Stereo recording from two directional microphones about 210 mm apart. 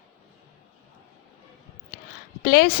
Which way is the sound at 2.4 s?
45° left (ahead or behind).